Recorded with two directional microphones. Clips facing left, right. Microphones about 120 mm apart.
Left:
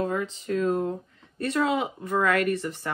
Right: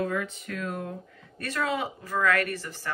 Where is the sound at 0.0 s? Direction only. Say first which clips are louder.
Left 2 dB; 25° left (ahead or behind).